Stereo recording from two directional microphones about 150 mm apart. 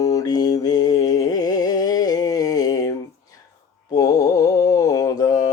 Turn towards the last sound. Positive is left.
turn(degrees=25)  # may be behind; listen again after turning